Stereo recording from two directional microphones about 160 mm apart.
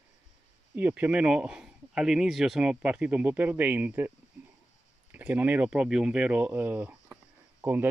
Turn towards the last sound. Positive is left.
turn(degrees=-10)  # may be behind; listen again after turning